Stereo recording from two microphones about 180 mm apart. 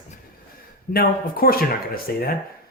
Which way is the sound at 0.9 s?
55° left (ahead or behind).